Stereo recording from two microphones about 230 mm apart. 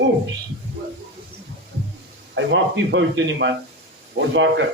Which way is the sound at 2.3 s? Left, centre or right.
Right.